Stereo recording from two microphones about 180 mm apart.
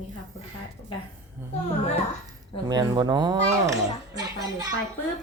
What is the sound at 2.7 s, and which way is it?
Speech, 20° right (ahead or behind).